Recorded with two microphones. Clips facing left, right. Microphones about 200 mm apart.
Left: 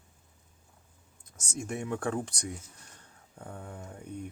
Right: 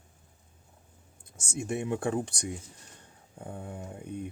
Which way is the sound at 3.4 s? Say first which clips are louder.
Right 3 dB; 15° right (ahead or behind).